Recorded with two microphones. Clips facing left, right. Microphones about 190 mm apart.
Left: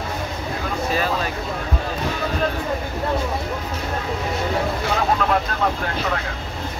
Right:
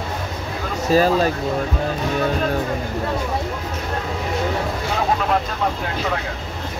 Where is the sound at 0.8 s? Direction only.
40° right (ahead or behind).